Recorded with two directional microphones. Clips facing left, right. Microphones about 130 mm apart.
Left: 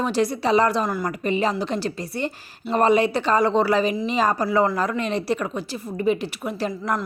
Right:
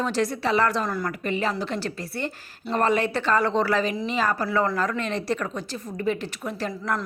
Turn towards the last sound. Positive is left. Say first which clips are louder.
# left 3 dB
turn(degrees=15)  # may be behind; listen again after turning